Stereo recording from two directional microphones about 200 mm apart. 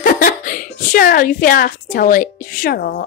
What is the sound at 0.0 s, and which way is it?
A woman's voice, 45° left (ahead or behind).